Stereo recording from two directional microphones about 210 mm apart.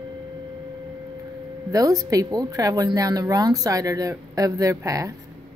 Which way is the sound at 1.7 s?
15° right (ahead or behind).